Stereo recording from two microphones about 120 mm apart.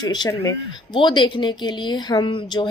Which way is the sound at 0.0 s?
35° left (ahead or behind).